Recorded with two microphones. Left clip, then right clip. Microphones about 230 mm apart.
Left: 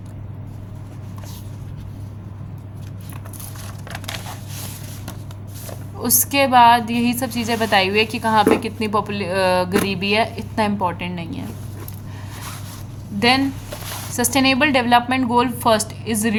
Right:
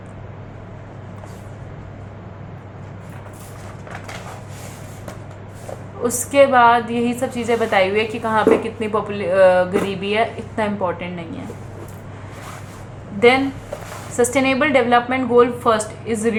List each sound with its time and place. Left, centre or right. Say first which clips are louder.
6.0 s speech: right 4 dB; left
13.1 s speech: right 3 dB; left